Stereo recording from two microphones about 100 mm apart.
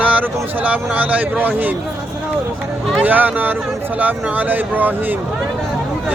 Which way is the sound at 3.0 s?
15° right (ahead or behind).